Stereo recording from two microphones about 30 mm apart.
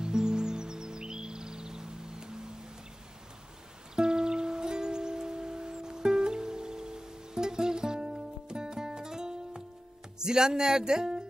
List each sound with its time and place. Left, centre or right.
0.0 s music: right
3.9 s music: right
10.1 s speech: right